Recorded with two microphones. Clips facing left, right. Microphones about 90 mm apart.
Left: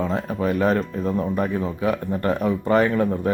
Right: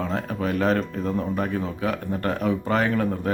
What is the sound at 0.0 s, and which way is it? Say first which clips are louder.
Speech: left 3 dB; 5° left (ahead or behind).